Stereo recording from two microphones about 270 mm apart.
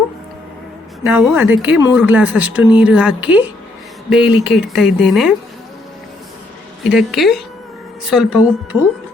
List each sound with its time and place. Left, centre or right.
1.0 s speech: centre
6.9 s speech: centre